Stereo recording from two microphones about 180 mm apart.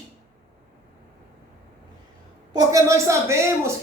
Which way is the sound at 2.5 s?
15° right (ahead or behind).